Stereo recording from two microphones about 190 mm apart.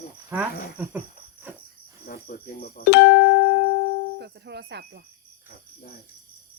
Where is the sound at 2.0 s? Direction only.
50° left (ahead or behind).